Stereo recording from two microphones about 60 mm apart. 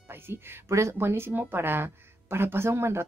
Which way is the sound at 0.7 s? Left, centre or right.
Right.